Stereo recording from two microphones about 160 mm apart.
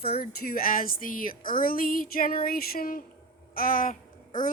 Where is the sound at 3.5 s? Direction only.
60° left (ahead or behind).